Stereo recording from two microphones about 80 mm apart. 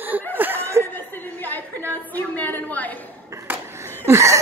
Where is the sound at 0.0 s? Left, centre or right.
Right.